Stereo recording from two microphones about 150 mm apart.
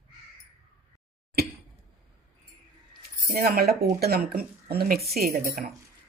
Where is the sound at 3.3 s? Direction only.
90° right.